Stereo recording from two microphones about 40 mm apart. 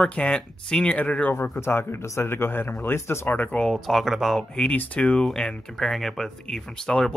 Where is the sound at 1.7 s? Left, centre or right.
Left.